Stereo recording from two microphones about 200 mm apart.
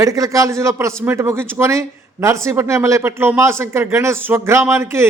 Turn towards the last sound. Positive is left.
turn(degrees=-15)  # may be behind; listen again after turning